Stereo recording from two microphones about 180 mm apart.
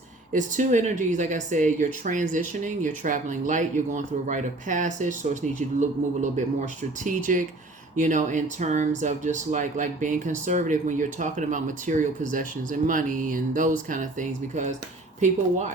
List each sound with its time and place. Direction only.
0.3 s speech: 45° right (ahead or behind)